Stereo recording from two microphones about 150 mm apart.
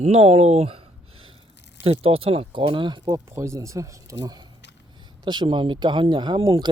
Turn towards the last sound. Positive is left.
turn(degrees=-30)  # may be behind; listen again after turning